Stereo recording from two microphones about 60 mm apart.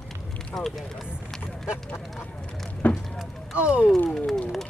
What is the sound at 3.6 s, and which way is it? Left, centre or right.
Speech, centre.